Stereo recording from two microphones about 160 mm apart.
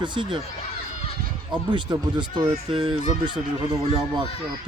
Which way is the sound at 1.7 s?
30° right (ahead or behind).